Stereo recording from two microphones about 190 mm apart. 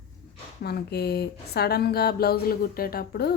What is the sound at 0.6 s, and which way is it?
A woman's voice, 60° left (ahead or behind).